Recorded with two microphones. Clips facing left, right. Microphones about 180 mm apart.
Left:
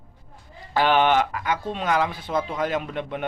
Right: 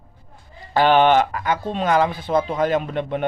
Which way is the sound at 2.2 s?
35° right (ahead or behind).